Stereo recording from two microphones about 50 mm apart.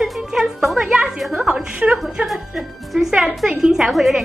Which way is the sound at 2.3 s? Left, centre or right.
Centre.